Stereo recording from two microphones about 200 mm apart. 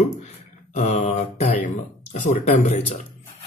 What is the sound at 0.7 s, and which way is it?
Speech, 35° left (ahead or behind).